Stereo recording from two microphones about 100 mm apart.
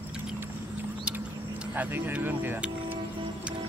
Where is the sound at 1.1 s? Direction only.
15° right (ahead or behind).